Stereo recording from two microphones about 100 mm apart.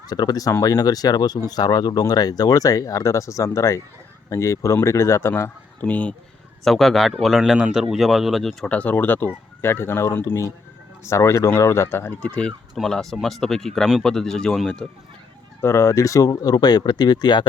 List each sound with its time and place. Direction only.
0.1 s speech: 40° left (ahead or behind); by 5.5 s 25° left (ahead or behind)
5.8 s speech: 15° left (ahead or behind)
6.7 s speech: centre (ahead or behind)
8.7 s speech: 15° left (ahead or behind)
15.6 s speech: 30° left (ahead or behind); by 17.4 s 45° left (ahead or behind)